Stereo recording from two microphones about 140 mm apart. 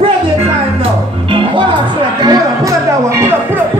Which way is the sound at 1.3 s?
35° right (ahead or behind).